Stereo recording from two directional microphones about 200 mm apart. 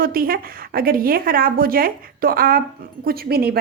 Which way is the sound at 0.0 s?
45° right (ahead or behind).